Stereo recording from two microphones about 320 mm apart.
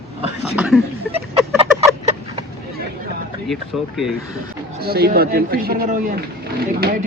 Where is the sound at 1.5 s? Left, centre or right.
Centre.